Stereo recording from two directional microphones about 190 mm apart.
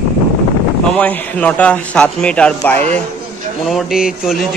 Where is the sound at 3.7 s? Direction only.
5° right (ahead or behind).